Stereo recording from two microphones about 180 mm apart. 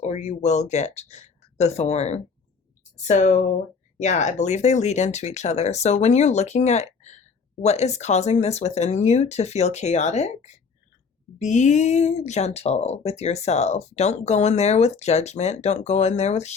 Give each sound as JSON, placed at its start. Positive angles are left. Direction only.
{"t": 0.0, "sound": "speech", "side_deg": 40}